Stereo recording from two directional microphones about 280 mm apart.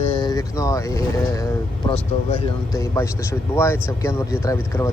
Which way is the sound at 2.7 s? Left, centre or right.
Centre.